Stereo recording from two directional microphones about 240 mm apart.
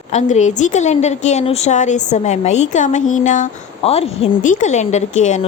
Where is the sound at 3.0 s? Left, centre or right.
Left.